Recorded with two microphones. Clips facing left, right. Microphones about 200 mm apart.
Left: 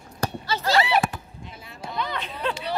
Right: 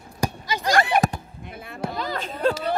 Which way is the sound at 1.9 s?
40° right (ahead or behind).